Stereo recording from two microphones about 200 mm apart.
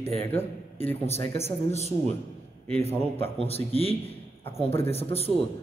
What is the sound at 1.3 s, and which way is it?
Speech, 30° left (ahead or behind).